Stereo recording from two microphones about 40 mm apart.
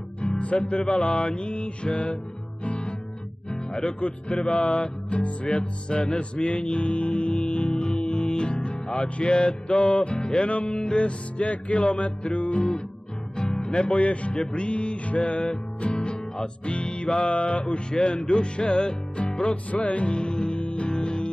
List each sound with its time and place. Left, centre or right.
0.2 s music: left
13.9 s speech: left
14.3 s music: left
19.5 s music: left